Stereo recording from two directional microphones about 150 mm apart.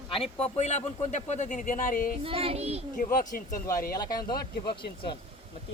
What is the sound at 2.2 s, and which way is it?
Child singing, 40° right (ahead or behind).